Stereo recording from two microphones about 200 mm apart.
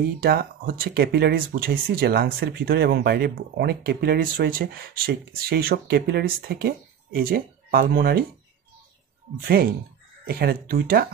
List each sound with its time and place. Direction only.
0.2 s speech: 50° right (ahead or behind)
9.5 s speech: 50° right (ahead or behind)